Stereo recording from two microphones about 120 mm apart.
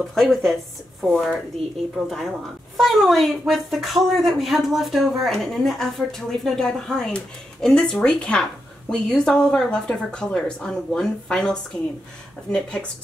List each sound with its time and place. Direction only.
0.0 s a woman's voice: centre (ahead or behind)
2.8 s a woman's voice: centre (ahead or behind)